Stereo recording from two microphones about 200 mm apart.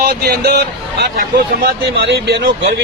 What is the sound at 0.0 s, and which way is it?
A man's voice, 50° right (ahead or behind).